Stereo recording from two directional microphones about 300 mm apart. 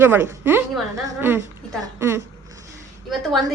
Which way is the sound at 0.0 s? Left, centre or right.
Centre.